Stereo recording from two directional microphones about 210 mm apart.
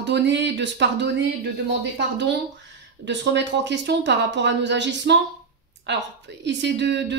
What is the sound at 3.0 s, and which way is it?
Speech, 55° right (ahead or behind).